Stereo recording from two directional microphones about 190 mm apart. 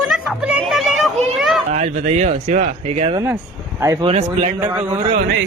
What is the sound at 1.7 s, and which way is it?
Speech, 40° right (ahead or behind).